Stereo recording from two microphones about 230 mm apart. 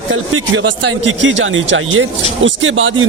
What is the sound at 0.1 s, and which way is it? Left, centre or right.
Speech, right.